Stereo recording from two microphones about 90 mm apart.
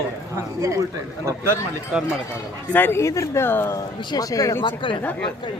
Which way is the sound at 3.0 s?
35° left (ahead or behind).